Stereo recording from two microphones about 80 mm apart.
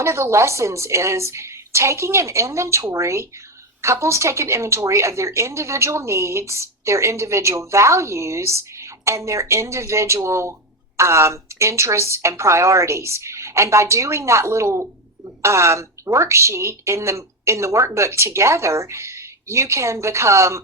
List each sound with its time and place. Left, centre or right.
0.0 s a woman's voice: right